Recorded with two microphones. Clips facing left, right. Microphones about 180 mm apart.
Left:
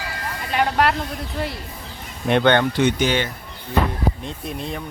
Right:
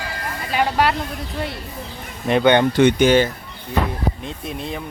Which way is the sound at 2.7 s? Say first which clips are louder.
Right 6 dB; 50° right (ahead or behind).